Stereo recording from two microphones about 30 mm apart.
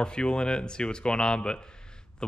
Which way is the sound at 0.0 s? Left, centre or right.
Left.